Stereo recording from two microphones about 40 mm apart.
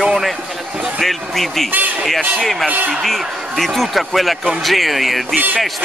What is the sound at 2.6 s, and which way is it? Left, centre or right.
Speech, right.